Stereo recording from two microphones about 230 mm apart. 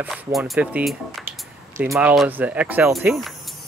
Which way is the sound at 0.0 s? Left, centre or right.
Centre.